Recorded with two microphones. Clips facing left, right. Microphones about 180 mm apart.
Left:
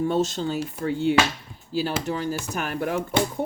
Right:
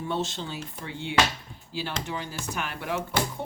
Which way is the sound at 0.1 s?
45° left (ahead or behind).